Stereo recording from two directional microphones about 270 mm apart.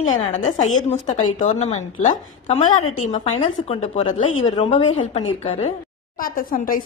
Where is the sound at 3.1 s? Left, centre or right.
Left.